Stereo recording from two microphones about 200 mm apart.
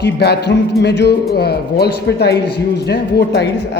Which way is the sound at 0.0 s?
55° left (ahead or behind).